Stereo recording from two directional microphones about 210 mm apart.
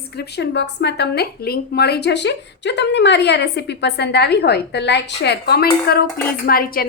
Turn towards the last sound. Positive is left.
turn(degrees=45)  # may be behind; listen again after turning